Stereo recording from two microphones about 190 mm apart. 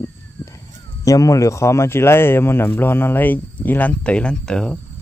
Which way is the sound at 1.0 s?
15° left (ahead or behind).